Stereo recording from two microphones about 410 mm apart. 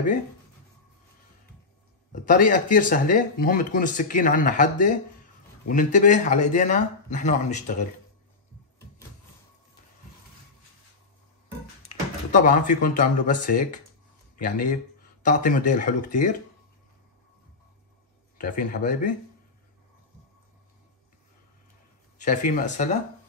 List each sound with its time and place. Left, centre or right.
2.2 s a man's voice: centre
11.8 s speech: centre
18.4 s speech: centre
22.2 s a man's voice: centre